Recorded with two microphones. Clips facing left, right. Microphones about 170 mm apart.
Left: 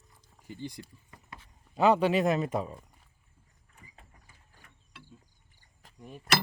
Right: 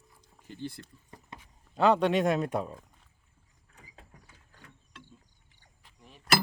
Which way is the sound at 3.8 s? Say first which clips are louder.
Right 3 dB; 90° right.